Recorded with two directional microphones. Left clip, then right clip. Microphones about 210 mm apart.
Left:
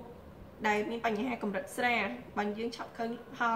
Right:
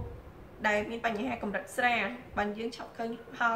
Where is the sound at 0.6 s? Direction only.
5° right (ahead or behind).